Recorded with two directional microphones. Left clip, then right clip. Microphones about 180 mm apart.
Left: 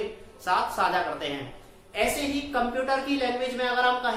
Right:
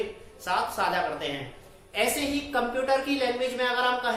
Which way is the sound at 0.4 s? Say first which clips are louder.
Left 2 dB; centre (ahead or behind).